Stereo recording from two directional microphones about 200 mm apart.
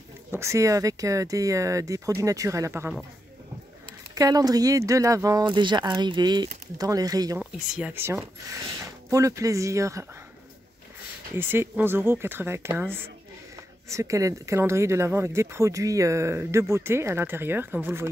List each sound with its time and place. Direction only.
0.3 s speech: 15° right (ahead or behind)
4.1 s speech: 20° right (ahead or behind)
7.3 s speech: 5° right (ahead or behind)
11.3 s speech: 10° right (ahead or behind)